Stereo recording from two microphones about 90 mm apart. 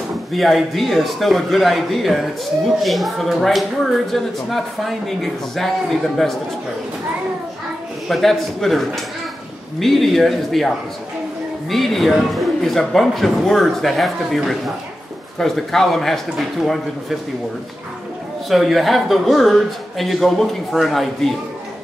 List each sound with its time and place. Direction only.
0.3 s a man's voice: centre (ahead or behind)
8.1 s a man's voice: centre (ahead or behind)
11.7 s a man's voice: centre (ahead or behind)
18.5 s a man's voice: centre (ahead or behind)